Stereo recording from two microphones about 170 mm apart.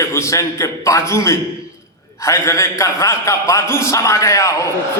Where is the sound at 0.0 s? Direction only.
15° left (ahead or behind).